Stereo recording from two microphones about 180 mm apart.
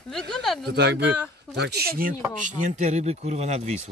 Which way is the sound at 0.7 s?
70° right (ahead or behind).